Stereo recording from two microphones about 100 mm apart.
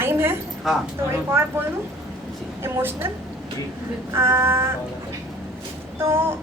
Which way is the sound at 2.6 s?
20° right (ahead or behind).